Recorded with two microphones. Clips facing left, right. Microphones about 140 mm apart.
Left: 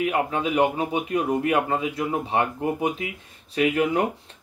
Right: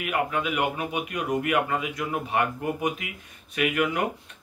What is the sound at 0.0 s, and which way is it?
Speech, 30° left (ahead or behind).